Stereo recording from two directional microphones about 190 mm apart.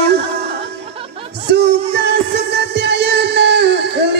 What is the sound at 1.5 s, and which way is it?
Music, 60° right (ahead or behind).